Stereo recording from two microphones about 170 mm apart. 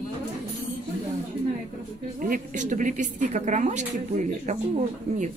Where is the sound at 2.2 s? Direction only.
50° right (ahead or behind).